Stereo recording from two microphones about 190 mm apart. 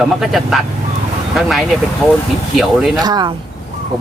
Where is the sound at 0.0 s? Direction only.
Centre (ahead or behind).